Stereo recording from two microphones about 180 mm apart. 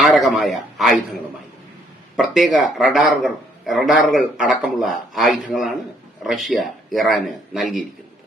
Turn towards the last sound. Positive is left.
turn(degrees=0)  # may be behind; listen again after turning